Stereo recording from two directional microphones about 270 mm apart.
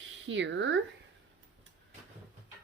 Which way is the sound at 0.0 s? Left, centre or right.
Right.